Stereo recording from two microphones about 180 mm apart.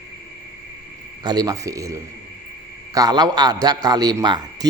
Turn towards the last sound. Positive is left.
turn(degrees=-20)  # may be behind; listen again after turning